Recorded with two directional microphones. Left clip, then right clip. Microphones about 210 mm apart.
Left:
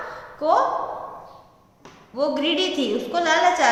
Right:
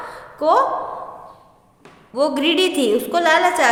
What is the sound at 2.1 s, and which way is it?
A woman's voice, 50° right (ahead or behind).